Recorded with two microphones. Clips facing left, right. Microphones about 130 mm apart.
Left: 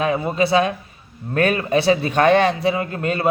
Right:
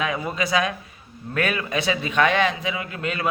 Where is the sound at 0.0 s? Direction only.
30° left (ahead or behind).